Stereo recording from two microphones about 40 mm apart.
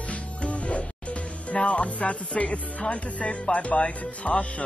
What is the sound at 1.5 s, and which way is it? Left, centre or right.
Speech, left.